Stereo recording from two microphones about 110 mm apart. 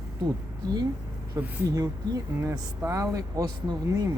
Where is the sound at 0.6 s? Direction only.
35° right (ahead or behind).